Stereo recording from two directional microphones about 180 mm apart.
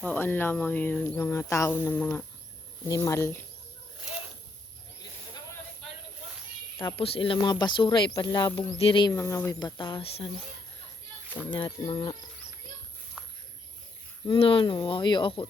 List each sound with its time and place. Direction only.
0.0 s speech: 10° left (ahead or behind)
6.7 s speech: 15° left (ahead or behind)
7.0 s speech: 30° left (ahead or behind)
11.5 s speech: 25° left (ahead or behind)
13.2 s a sound: 5° right (ahead or behind)
14.3 s speech: 30° left (ahead or behind)